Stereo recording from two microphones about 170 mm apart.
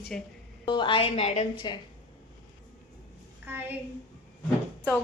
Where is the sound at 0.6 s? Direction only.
30° left (ahead or behind).